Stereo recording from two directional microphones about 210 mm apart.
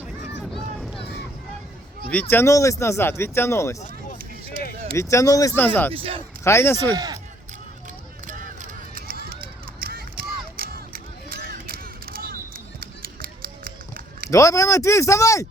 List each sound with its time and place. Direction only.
0.5 s vehicle: centre (ahead or behind)
2.3 s speech: 15° left (ahead or behind)
4.9 s speech: 15° left (ahead or behind)
5.9 s speech: 25° right (ahead or behind)
6.4 s speech: 10° left (ahead or behind)
6.9 s speech: 15° right (ahead or behind)
8.3 s a sound: 35° right (ahead or behind)
12.8 s run: 45° right (ahead or behind)
14.3 s speech: 15° left (ahead or behind)